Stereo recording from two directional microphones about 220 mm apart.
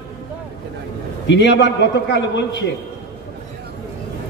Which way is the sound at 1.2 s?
55° left (ahead or behind).